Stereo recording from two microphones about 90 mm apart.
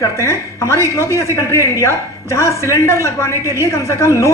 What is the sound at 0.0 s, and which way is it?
A woman's voice, 30° left (ahead or behind).